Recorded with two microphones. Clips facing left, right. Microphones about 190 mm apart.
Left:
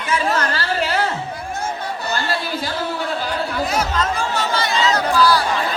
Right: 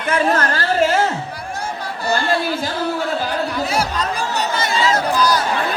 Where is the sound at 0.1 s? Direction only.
50° right (ahead or behind).